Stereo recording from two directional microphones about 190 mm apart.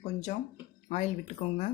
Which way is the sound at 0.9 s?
40° left (ahead or behind).